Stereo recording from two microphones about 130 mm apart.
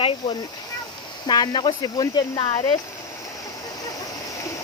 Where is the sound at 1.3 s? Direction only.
35° left (ahead or behind).